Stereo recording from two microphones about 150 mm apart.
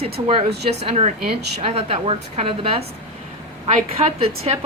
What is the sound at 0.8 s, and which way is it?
A woman's voice, 40° right (ahead or behind).